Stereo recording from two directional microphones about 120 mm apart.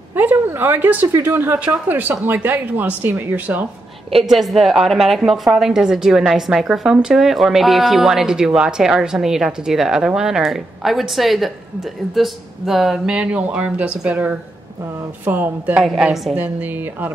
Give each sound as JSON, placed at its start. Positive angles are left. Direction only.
{"t": 0.1, "sound": "speech", "side_deg": -15}
{"t": 4.1, "sound": "a woman's voice", "side_deg": 0}
{"t": 15.8, "sound": "a woman's voice", "side_deg": 0}
{"t": 16.3, "sound": "speech", "side_deg": -15}